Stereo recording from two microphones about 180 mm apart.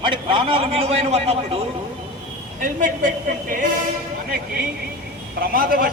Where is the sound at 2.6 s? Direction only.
50° right (ahead or behind).